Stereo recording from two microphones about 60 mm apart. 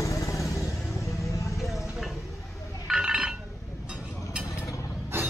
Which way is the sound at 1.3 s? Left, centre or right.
Left.